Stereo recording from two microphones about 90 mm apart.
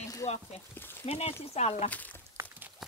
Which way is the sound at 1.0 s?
90° left.